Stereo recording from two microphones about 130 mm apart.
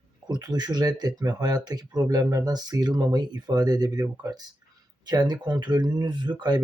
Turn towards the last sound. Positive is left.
turn(degrees=-35)  # may be behind; listen again after turning